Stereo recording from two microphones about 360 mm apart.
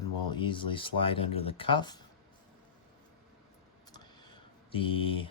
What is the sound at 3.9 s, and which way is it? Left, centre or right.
Typing, centre.